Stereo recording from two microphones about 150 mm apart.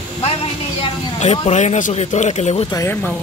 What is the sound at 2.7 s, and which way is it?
Speech, 20° left (ahead or behind).